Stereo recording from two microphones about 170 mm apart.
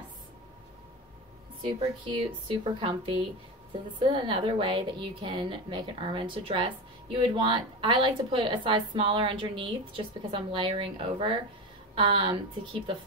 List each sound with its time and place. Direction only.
1.6 s a woman's voice: 30° right (ahead or behind)